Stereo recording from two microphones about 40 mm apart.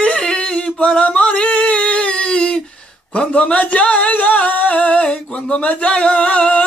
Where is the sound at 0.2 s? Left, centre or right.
Centre.